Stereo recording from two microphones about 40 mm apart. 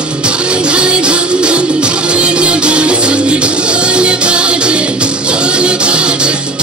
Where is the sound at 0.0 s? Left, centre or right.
Right.